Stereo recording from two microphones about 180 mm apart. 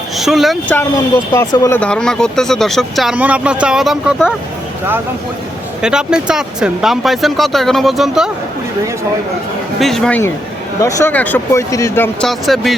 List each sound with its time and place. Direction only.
0.2 s speech: centre (ahead or behind)
1.3 s speech: 20° left (ahead or behind)
1.8 s speech: 5° left (ahead or behind)
5.8 s speech: 5° right (ahead or behind)
9.8 s speech: 5° left (ahead or behind)
12.3 s speech: centre (ahead or behind)